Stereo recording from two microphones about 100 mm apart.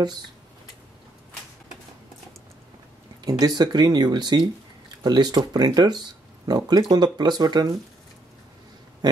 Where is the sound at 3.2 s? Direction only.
40° right (ahead or behind).